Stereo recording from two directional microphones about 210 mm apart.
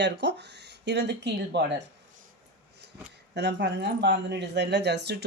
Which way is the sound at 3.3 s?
55° right (ahead or behind).